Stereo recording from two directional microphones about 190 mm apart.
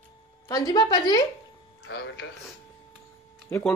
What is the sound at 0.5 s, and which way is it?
Speech, 20° left (ahead or behind).